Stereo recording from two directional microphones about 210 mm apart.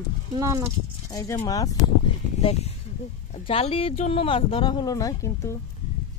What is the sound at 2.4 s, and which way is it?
A child's voice, 30° left (ahead or behind).